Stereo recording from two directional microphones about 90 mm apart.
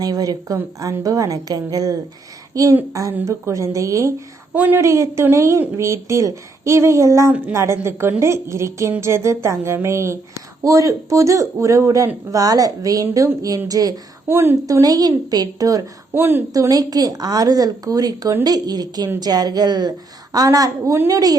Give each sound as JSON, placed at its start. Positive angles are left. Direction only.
{"t": 0.0, "sound": "a woman's voice", "side_deg": -45}
{"t": 4.5, "sound": "a woman's voice", "side_deg": -20}
{"t": 4.8, "sound": "a woman's voice", "side_deg": -35}
{"t": 14.3, "sound": "a woman's voice", "side_deg": -25}
{"t": 14.7, "sound": "speech", "side_deg": -40}
{"t": 16.1, "sound": "a woman's voice", "side_deg": -25}
{"t": 16.5, "sound": "speech", "side_deg": -40}